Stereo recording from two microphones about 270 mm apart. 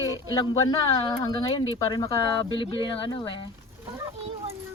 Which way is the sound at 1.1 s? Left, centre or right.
Centre.